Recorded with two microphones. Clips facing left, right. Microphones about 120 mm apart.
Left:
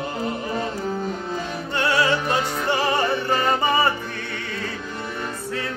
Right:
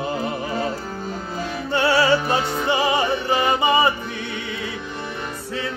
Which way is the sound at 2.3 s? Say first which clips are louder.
Right 1 dB; 5° right (ahead or behind).